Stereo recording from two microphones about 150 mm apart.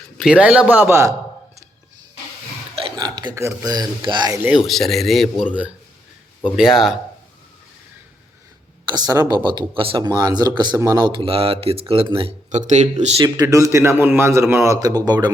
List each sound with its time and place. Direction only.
0.2 s a man's voice: 5° right (ahead or behind)
2.7 s speech: 35° right (ahead or behind)
4.6 s speech: centre (ahead or behind)
6.4 s speech: 5° right (ahead or behind)
8.9 s a man's voice: 25° right (ahead or behind)
12.5 s speech: 50° right (ahead or behind)
13.2 s a man's voice: 25° right (ahead or behind)